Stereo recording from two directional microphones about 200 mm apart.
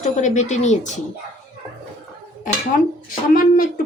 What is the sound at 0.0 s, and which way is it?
Speech, 40° left (ahead or behind).